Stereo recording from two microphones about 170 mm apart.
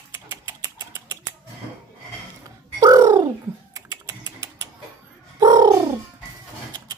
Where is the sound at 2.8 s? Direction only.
20° right (ahead or behind).